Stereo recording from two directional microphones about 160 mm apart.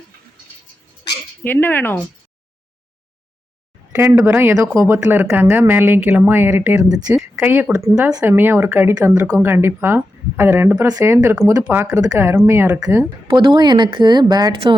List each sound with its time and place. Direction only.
1.5 s speech: 10° left (ahead or behind)
3.9 s speech: 15° right (ahead or behind)
11.6 s speech: 10° right (ahead or behind)
13.2 s speech: 30° right (ahead or behind)